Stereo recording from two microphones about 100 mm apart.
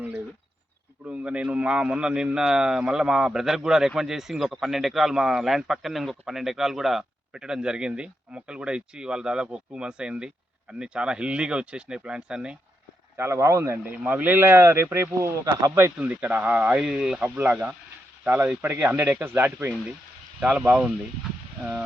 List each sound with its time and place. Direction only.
1.0 s a man's voice: 10° right (ahead or behind)
13.1 s speech: 30° right (ahead or behind)
13.8 s speech: 20° right (ahead or behind)
16.0 s a man's voice: 15° right (ahead or behind)